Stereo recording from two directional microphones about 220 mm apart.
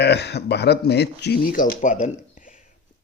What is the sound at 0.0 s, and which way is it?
Speech, 50° left (ahead or behind).